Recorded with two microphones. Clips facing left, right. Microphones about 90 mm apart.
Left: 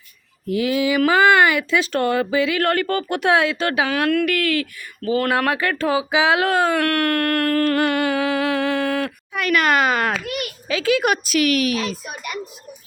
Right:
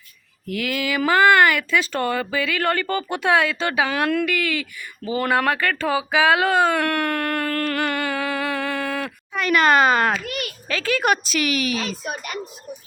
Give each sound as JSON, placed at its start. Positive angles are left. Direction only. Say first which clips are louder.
{"t": 0.4, "sound": "speech", "louder": "left 6 dB", "side_deg": 20}
{"t": 3.8, "sound": "speech", "louder": "left 1 dB", "side_deg": 5}